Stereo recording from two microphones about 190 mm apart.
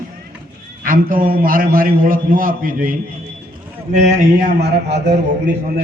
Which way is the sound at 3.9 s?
40° right (ahead or behind).